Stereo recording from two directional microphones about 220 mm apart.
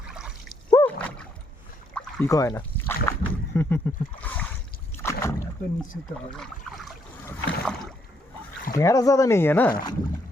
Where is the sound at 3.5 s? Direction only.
10° left (ahead or behind).